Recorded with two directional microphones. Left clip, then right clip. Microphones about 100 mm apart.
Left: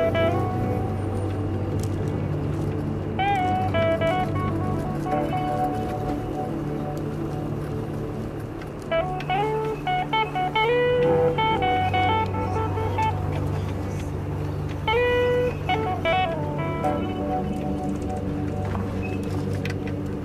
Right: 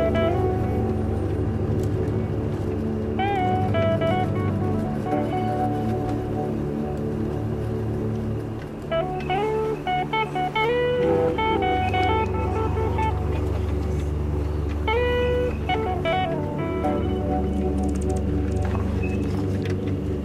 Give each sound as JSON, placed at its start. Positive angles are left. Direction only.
{"t": 0.0, "sound": "music", "side_deg": 0}
{"t": 3.2, "sound": "music", "side_deg": 0}
{"t": 8.9, "sound": "music", "side_deg": 0}
{"t": 14.9, "sound": "music", "side_deg": 0}